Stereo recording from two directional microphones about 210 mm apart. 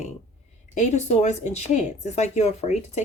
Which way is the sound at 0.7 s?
35° left (ahead or behind).